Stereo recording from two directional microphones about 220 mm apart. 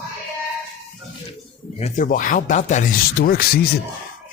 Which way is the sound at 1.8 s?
35° left (ahead or behind).